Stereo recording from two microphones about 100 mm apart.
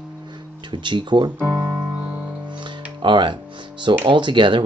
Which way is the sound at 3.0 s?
55° right (ahead or behind).